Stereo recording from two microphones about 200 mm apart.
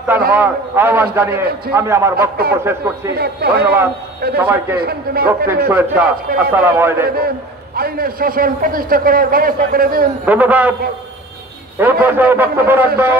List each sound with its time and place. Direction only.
0.3 s a man's voice: 10° right (ahead or behind)
3.2 s a man's voice: 50° right (ahead or behind)
3.6 s a man's voice: 10° right (ahead or behind)
4.7 s a man's voice: 50° right (ahead or behind)
5.7 s a man's voice: 10° right (ahead or behind)
7.2 s a man's voice: 50° right (ahead or behind)
10.2 s a man's voice: 10° right (ahead or behind)
11.8 s a man's voice: 10° right (ahead or behind)